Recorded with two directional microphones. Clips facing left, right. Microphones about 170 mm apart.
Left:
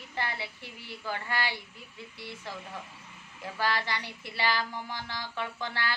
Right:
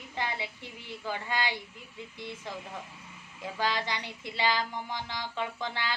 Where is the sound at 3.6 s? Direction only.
20° right (ahead or behind).